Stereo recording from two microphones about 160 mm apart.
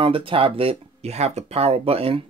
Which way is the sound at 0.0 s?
35° right (ahead or behind).